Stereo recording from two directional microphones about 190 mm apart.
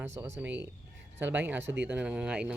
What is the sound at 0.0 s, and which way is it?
Speech, 15° right (ahead or behind).